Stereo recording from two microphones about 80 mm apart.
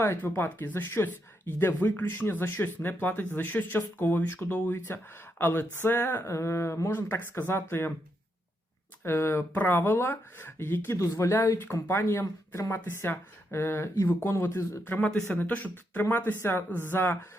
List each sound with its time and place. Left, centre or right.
0.0 s speech: left
7.1 s speech: left
9.0 s speech: left
14.8 s speech: left